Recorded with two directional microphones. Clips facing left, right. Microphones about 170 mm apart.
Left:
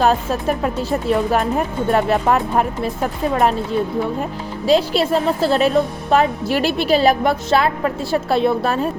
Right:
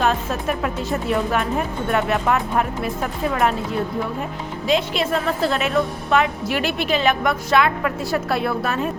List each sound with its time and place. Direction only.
0.0 s speech: 35° left (ahead or behind)
4.6 s speech: 35° left (ahead or behind)